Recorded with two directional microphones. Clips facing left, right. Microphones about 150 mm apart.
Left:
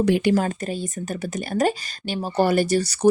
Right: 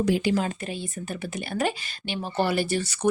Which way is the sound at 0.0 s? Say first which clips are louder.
Left 4 dB; 65° left (ahead or behind).